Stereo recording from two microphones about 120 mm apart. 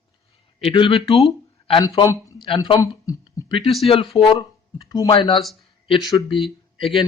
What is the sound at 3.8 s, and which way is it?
Speech, 50° left (ahead or behind).